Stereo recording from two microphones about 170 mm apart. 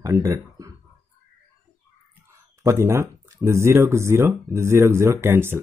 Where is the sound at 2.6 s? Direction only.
15° right (ahead or behind).